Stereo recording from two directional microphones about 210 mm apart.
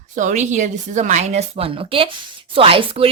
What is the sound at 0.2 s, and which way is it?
A woman's voice, 35° right (ahead or behind).